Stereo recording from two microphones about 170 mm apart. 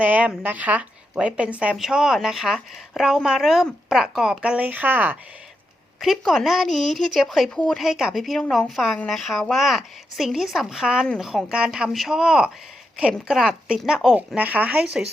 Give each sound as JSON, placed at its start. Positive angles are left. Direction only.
{"t": 0.0, "sound": "speech", "side_deg": -10}